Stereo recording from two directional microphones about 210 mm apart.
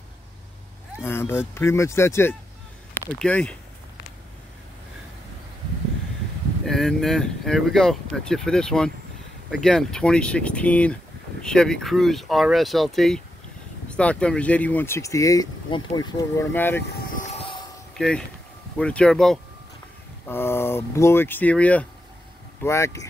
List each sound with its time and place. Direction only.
1.0 s speech: 10° left (ahead or behind)
6.6 s speech: centre (ahead or behind)
17.1 s vehicle: 35° left (ahead or behind)
17.9 s speech: 5° left (ahead or behind)